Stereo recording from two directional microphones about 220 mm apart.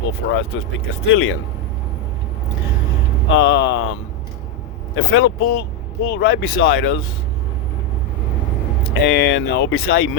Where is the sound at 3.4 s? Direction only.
60° left (ahead or behind).